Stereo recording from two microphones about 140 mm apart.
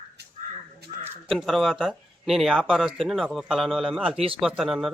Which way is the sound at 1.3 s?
Centre (ahead or behind).